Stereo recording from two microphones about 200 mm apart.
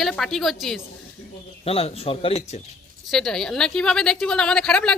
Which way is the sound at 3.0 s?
Centre (ahead or behind).